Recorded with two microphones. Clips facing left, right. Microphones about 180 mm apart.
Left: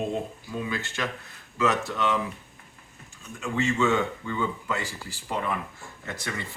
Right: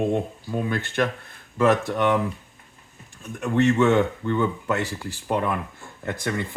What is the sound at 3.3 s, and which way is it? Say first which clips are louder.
Speech: right 7 dB; 65° right (ahead or behind).